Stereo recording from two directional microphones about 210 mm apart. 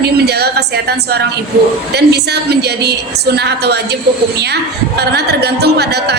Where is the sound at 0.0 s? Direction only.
50° right (ahead or behind).